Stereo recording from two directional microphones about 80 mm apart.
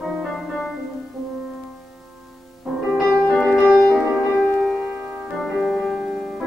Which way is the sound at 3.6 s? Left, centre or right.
Centre.